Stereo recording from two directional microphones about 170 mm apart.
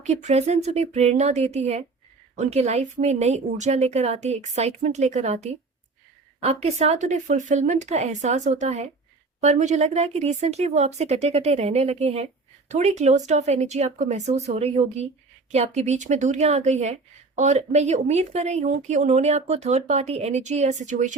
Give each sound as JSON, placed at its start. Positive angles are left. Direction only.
{"t": 0.0, "sound": "speech", "side_deg": -40}